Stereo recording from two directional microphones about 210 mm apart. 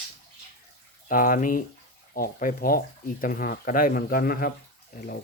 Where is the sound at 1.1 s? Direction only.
40° left (ahead or behind).